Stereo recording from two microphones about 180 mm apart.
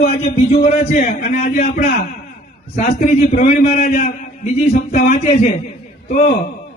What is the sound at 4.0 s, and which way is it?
Speech, 40° left (ahead or behind).